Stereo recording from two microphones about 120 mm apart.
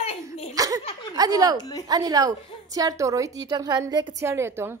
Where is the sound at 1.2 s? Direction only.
30° right (ahead or behind).